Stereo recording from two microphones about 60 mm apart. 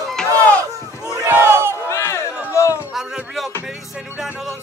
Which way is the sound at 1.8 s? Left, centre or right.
Left.